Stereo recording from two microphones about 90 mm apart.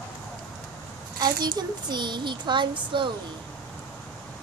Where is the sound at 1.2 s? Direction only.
50° right (ahead or behind).